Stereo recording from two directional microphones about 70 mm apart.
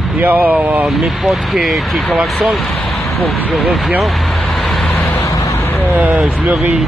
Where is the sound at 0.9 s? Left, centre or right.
Centre.